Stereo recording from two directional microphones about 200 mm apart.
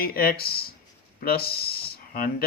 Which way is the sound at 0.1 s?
50° left (ahead or behind).